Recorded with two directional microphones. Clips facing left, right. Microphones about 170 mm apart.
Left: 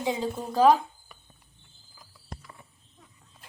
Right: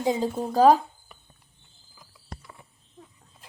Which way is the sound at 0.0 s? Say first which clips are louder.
Right 4 dB; 40° right (ahead or behind).